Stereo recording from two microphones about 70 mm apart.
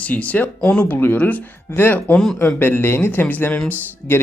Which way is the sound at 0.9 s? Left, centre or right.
Left.